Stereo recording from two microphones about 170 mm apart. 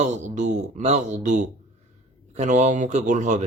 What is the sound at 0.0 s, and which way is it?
Speech, 45° right (ahead or behind).